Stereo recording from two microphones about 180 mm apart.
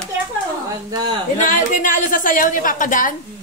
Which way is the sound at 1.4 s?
45° left (ahead or behind).